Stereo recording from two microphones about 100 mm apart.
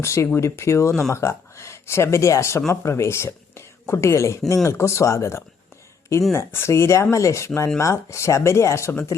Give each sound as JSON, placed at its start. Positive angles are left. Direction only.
{"t": 0.0, "sound": "speech", "side_deg": 30}